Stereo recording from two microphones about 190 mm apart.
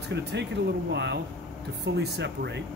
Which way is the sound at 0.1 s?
65° right (ahead or behind).